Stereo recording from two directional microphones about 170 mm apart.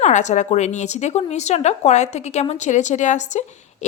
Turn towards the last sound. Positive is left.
turn(degrees=45)  # may be behind; listen again after turning